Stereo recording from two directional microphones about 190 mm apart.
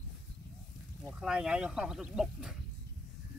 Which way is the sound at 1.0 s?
5° right (ahead or behind).